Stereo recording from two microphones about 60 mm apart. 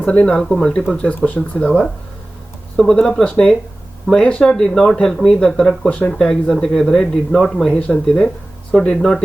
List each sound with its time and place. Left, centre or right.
0.0 s speech: left
0.3 s speech: centre
0.9 s speech: left
4.4 s speech: centre